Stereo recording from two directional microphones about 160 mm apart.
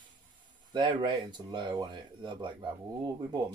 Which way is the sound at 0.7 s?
30° right (ahead or behind).